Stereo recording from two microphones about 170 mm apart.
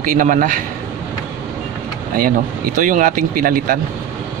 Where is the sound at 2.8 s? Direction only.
50° right (ahead or behind).